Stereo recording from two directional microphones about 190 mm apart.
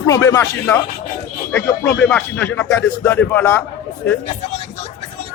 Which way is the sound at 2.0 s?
5° left (ahead or behind).